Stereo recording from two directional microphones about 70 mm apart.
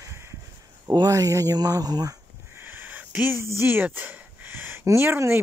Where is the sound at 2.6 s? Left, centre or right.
Right.